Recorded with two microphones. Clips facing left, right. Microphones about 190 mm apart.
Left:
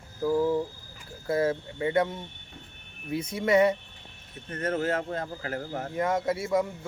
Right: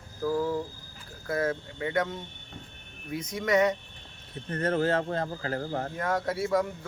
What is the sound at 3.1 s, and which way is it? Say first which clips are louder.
Speech: left 2 dB; 30° left (ahead or behind).